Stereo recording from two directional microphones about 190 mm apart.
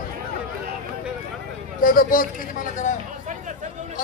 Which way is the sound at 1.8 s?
45° left (ahead or behind).